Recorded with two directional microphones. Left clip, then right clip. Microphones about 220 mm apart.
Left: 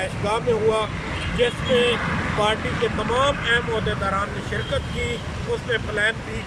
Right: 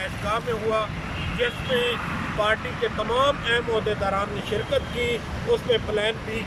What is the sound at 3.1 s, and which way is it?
Speech, centre (ahead or behind).